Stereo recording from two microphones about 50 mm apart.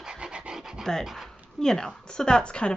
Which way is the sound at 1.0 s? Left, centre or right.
Centre.